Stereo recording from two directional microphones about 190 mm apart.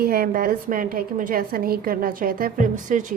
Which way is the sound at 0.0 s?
50° right (ahead or behind).